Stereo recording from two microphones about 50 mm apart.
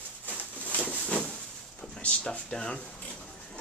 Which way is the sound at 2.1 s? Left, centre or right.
Centre.